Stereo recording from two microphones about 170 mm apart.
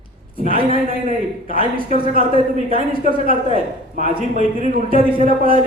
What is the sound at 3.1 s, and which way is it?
A man's voice, 55° right (ahead or behind).